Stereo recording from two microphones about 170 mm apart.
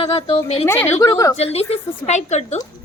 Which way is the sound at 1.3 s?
35° left (ahead or behind).